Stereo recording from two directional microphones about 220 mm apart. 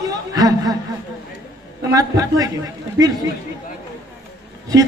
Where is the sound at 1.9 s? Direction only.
15° right (ahead or behind).